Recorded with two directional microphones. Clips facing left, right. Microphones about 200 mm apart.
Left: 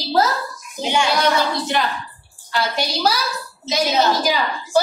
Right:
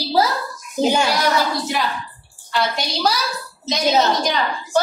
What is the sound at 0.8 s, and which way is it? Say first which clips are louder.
Speech: right 4 dB; 40° right (ahead or behind).